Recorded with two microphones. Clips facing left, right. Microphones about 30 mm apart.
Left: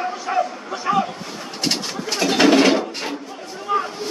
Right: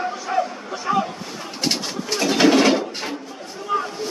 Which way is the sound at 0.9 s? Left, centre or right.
Left.